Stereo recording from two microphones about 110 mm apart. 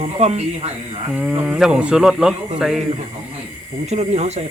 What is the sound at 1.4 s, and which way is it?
Speech, 5° right (ahead or behind).